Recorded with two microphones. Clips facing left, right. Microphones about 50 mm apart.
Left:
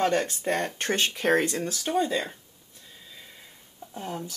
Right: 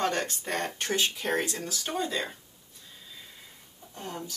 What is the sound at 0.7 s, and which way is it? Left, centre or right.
Speech, left.